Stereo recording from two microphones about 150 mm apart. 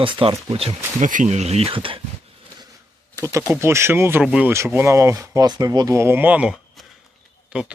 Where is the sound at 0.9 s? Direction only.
55° right (ahead or behind); by 2.0 s 35° right (ahead or behind).